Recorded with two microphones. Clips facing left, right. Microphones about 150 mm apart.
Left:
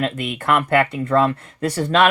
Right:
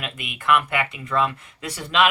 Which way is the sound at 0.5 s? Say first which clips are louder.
Left 5 dB; 55° left (ahead or behind).